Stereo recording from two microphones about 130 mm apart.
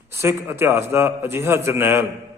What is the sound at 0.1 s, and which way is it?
A man's voice, 20° right (ahead or behind).